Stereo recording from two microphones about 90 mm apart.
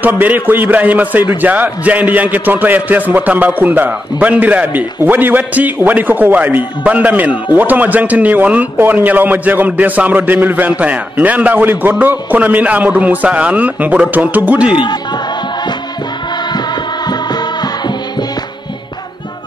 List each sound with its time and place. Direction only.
0.0 s a man's voice: 20° right (ahead or behind)
14.7 s speech: 65° left (ahead or behind)
16.5 s music: 50° left (ahead or behind)